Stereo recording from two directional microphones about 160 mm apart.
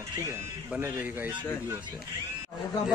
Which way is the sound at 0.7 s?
10° right (ahead or behind).